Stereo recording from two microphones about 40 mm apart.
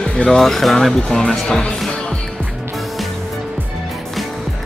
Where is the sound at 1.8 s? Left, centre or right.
Centre.